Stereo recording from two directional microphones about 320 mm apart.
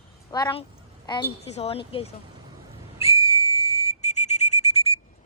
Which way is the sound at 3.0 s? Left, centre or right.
Centre.